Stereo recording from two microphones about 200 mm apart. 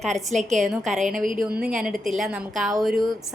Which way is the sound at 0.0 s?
Centre (ahead or behind).